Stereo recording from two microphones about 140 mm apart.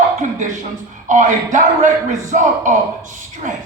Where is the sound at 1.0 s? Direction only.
65° right (ahead or behind).